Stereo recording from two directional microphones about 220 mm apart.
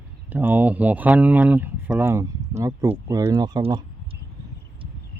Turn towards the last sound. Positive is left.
turn(degrees=-25)  # may be behind; listen again after turning